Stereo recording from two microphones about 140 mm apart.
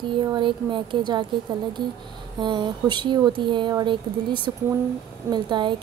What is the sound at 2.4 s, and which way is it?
Speech, 35° right (ahead or behind).